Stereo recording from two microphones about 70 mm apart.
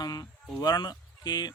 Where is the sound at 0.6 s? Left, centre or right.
Left.